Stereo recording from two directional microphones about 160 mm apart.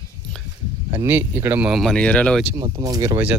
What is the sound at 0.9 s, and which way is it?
Speech, 15° right (ahead or behind).